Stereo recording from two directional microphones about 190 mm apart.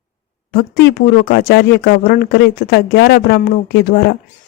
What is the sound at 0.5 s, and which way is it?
Speech, 55° left (ahead or behind).